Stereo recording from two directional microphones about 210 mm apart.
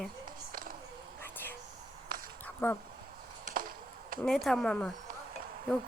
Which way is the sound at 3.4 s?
40° right (ahead or behind).